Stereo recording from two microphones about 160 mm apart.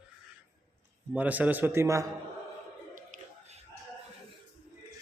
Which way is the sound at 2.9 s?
45° right (ahead or behind).